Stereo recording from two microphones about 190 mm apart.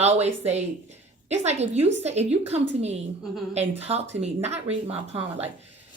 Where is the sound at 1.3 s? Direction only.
35° right (ahead or behind).